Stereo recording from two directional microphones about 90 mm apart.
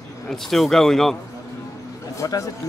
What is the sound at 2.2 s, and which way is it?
Speech, 35° left (ahead or behind).